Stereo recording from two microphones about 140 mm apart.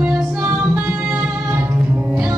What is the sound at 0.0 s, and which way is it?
Music, 5° right (ahead or behind).